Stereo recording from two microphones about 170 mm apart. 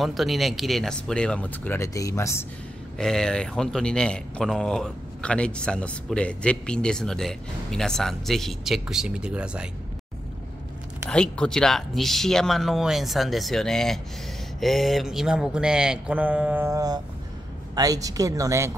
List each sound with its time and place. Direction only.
0.0 s speech: centre (ahead or behind); by 2.4 s 15° left (ahead or behind)
3.0 s speech: 5° left (ahead or behind)
11.1 s speech: 5° left (ahead or behind); by 18.7 s 20° right (ahead or behind)